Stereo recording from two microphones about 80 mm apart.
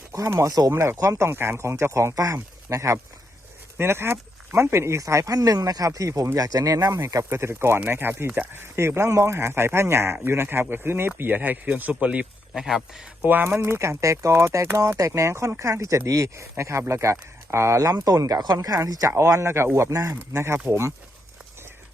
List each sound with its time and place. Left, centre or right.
0.1 s speech: right
0.7 s speech: right
0.9 s speech: right
1.3 s speech: right
12.5 s speech: centre
13.2 s speech: right
17.7 s speech: right